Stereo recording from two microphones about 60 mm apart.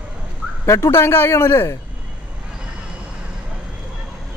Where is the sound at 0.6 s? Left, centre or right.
Left.